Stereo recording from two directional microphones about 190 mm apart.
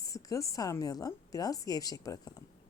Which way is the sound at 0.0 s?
15° left (ahead or behind).